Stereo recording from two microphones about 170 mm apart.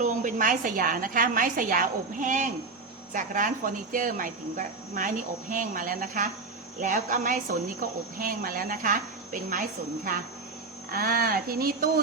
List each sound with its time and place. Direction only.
0.0 s speech: 45° right (ahead or behind)